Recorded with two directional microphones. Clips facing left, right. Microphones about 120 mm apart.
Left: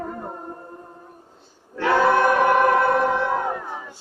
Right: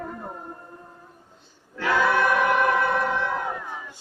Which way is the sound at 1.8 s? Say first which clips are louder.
Left 4 dB; 30° left (ahead or behind).